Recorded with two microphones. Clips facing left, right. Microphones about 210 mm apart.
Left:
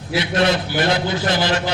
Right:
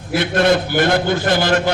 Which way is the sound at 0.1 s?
50° right (ahead or behind).